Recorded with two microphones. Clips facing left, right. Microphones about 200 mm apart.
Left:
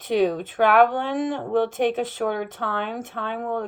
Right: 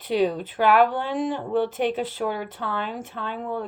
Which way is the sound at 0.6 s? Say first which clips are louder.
Left 1 dB; 50° left (ahead or behind).